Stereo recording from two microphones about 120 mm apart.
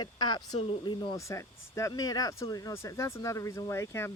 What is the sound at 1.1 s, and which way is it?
Speech, 25° left (ahead or behind).